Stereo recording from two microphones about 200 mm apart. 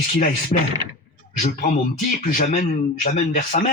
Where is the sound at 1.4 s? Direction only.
40° left (ahead or behind).